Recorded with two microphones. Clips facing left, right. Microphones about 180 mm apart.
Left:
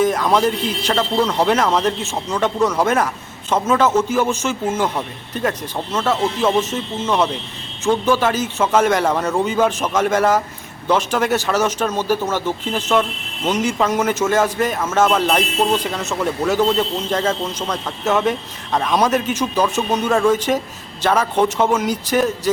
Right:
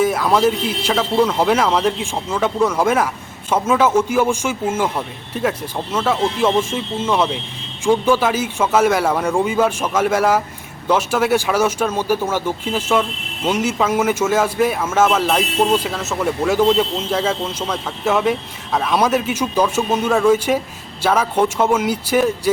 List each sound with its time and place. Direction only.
0.0 s speech: 5° right (ahead or behind)